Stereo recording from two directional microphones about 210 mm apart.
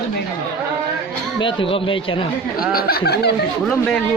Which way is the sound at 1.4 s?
25° left (ahead or behind).